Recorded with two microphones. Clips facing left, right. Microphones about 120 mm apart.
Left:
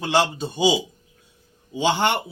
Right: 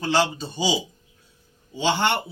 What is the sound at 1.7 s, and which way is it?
Speech, 15° left (ahead or behind).